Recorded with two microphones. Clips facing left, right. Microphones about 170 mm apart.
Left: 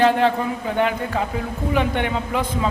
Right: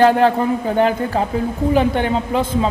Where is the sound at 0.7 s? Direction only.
35° right (ahead or behind).